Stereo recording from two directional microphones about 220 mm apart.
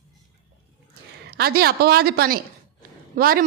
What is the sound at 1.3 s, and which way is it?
A woman's voice, 45° right (ahead or behind).